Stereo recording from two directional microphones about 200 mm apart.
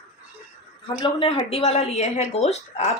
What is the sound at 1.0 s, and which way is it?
Speech, 30° left (ahead or behind).